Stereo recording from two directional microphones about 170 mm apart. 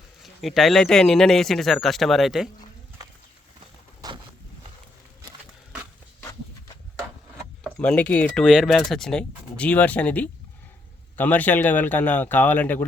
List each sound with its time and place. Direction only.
0.2 s speech: centre (ahead or behind)
4.0 s vehicle: 20° right (ahead or behind)
7.6 s speech: 5° left (ahead or behind)